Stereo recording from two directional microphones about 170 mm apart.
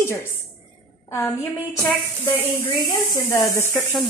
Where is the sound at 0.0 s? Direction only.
15° left (ahead or behind).